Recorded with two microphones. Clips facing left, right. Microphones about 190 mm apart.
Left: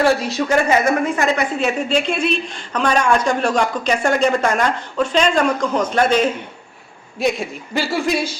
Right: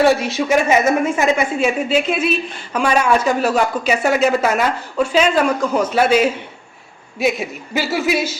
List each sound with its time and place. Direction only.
0.1 s a woman's voice: 20° right (ahead or behind); by 8.4 s 5° right (ahead or behind)